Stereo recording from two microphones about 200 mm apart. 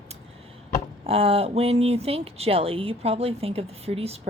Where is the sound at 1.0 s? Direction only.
30° right (ahead or behind).